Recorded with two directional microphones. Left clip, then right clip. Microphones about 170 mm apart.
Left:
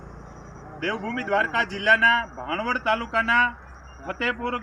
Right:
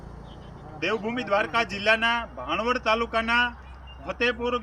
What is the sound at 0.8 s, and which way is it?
A man's voice, 20° right (ahead or behind).